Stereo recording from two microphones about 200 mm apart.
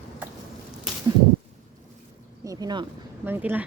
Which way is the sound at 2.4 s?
20° right (ahead or behind).